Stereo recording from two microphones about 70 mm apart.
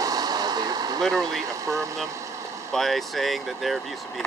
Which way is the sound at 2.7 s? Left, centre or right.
Centre.